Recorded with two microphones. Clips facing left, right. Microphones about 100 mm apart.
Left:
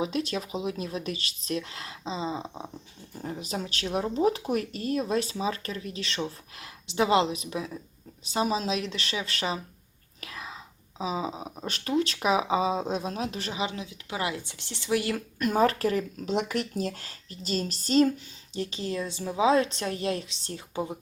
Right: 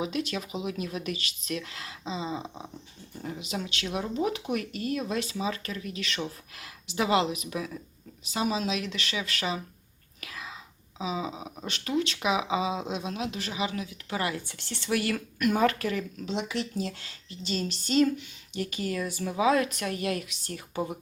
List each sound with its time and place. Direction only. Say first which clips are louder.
0.0 s speech: left 2 dB; 35° left (ahead or behind)
10.2 s whispering: left 1 dB; 30° left (ahead or behind)
10.9 s speech: left 2 dB; 35° left (ahead or behind); by 15.2 s 20° left (ahead or behind)
15.4 s speech: left 1 dB; 30° left (ahead or behind)
18.5 s a woman's voice: even; 25° left (ahead or behind)